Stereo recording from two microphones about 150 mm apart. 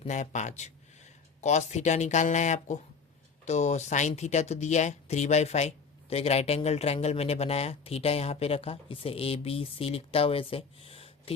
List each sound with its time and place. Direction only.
0.1 s speech: 55° left (ahead or behind)